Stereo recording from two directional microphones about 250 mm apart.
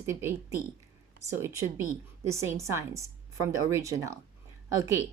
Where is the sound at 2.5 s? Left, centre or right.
Centre.